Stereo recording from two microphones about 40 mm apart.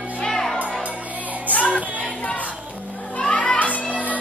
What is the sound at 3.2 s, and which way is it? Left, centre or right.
Children playing, left.